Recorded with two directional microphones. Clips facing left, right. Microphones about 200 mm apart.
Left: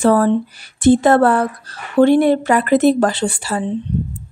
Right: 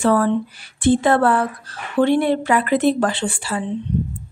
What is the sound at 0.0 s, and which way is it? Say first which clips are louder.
Speech: left 3 dB; 40° left (ahead or behind).